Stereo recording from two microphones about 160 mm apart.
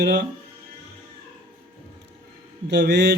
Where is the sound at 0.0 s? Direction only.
90° right.